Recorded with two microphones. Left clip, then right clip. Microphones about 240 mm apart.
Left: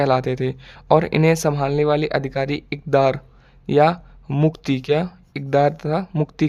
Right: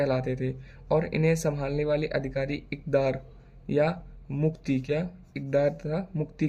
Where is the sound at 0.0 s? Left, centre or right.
Left.